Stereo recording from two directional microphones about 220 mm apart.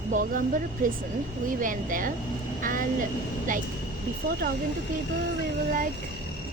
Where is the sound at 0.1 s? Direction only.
35° right (ahead or behind).